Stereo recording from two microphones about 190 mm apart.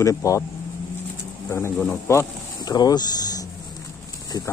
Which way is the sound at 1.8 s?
10° left (ahead or behind).